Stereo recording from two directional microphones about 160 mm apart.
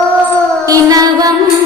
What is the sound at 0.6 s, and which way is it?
Music, 25° right (ahead or behind).